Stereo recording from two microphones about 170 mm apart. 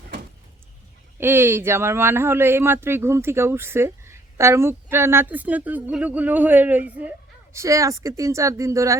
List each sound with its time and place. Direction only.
1.2 s speech: 15° right (ahead or behind)